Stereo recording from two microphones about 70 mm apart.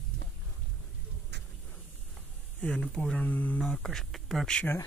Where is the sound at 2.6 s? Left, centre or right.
Centre.